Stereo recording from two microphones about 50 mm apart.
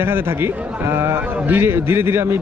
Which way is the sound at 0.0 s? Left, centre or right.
Right.